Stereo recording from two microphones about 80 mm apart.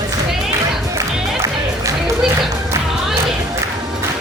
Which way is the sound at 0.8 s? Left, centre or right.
Right.